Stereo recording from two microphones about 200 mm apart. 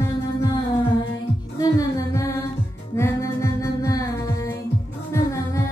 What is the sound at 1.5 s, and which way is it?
Music, 15° left (ahead or behind).